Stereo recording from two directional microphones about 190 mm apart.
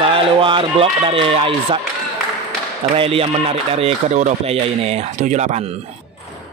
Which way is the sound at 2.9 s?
30° right (ahead or behind).